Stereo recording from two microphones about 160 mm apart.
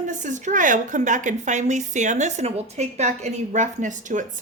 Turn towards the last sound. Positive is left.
turn(degrees=-50)  # may be behind; listen again after turning